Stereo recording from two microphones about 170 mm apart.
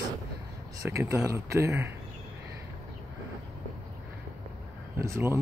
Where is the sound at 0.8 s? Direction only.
15° right (ahead or behind).